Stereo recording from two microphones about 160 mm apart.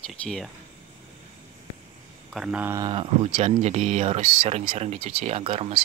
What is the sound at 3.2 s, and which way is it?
Speech, 50° right (ahead or behind).